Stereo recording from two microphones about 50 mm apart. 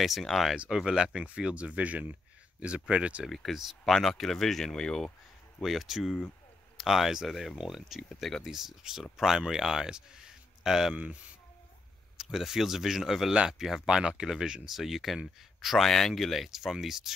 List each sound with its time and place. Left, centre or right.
0.2 s speech: centre
0.7 s speech: centre
3.3 s speech: centre
5.6 s speech: centre
8.1 s speech: centre
8.4 s speech: centre
12.2 s speech: centre
15.8 s speech: centre